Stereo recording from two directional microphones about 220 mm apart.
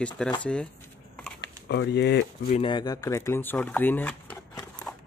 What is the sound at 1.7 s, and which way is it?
Speech, 50° left (ahead or behind).